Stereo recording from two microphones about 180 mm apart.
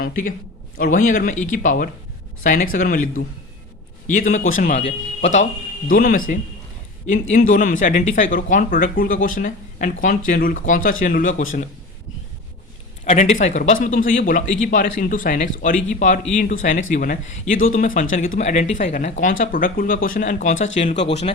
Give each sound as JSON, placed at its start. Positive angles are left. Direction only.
{"t": 0.0, "sound": "a man's voice", "side_deg": 50}
{"t": 5.9, "sound": "speech", "side_deg": 50}
{"t": 13.1, "sound": "speech", "side_deg": 35}
{"t": 20.9, "sound": "speech", "side_deg": 80}